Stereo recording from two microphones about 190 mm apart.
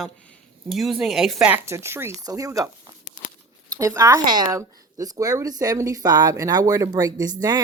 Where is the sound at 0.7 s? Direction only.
Centre (ahead or behind); by 2.6 s 15° right (ahead or behind).